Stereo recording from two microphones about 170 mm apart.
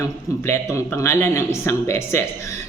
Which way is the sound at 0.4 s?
15° left (ahead or behind).